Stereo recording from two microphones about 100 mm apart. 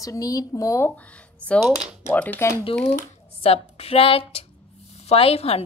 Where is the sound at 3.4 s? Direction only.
85° left.